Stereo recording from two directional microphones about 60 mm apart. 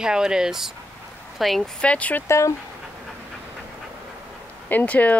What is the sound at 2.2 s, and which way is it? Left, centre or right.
Speech, left.